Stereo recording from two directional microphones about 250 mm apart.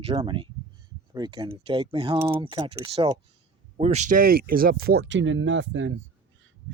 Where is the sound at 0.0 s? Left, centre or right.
Right.